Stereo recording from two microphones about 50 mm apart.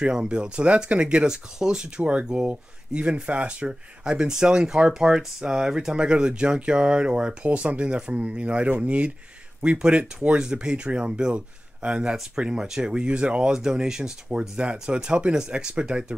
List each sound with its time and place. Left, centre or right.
0.0 s speech: centre